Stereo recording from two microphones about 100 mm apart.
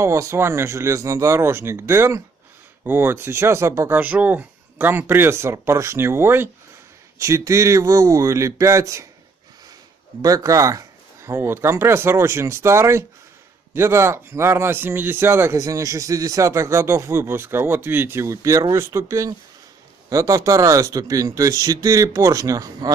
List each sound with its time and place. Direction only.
0.0 s speech: 30° right (ahead or behind)
4.0 s speech: 15° right (ahead or behind); by 9.0 s 30° right (ahead or behind)
10.2 s speech: 35° right (ahead or behind)